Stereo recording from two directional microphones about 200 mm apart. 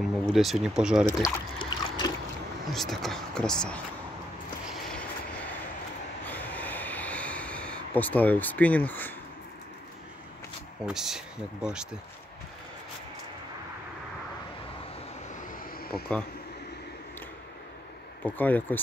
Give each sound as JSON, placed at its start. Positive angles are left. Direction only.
{"t": 0.0, "sound": "speech", "side_deg": 0}
{"t": 1.2, "sound": "a sound", "side_deg": 20}
{"t": 2.7, "sound": "speech", "side_deg": 0}
{"t": 6.2, "sound": "snort", "side_deg": 10}
{"t": 10.9, "sound": "speech", "side_deg": 0}
{"t": 15.9, "sound": "speech", "side_deg": 5}
{"t": 18.2, "sound": "speech", "side_deg": 10}